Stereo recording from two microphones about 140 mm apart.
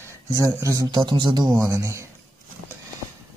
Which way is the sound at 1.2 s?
30° right (ahead or behind).